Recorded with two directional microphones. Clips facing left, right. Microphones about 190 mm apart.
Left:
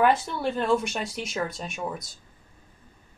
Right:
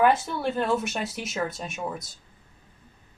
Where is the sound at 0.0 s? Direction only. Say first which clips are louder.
Right 1 dB; centre (ahead or behind).